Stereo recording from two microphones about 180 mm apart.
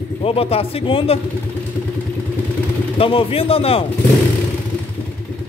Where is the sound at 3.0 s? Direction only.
30° left (ahead or behind).